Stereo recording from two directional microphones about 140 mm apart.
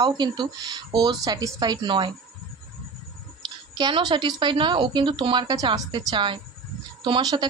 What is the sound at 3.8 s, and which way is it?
Speech, 30° right (ahead or behind).